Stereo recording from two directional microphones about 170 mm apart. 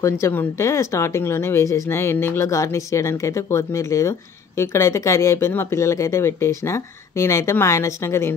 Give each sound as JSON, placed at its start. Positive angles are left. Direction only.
{"t": 0.0, "sound": "speech", "side_deg": 15}